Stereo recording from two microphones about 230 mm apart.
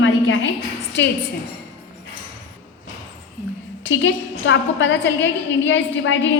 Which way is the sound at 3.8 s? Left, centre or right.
Left.